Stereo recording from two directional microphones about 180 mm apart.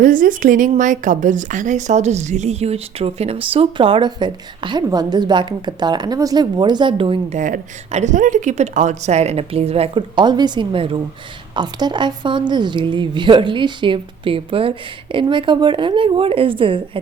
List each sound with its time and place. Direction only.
0.0 s a woman's voice: 50° right (ahead or behind); by 17.0 s 30° right (ahead or behind)